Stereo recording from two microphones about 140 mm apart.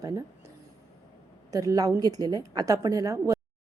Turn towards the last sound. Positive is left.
turn(degrees=-25)  # may be behind; listen again after turning